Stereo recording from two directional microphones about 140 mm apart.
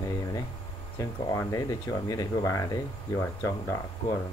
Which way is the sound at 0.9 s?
20° left (ahead or behind).